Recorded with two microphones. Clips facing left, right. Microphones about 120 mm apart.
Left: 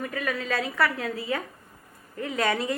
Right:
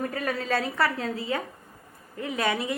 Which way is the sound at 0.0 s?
35° right (ahead or behind).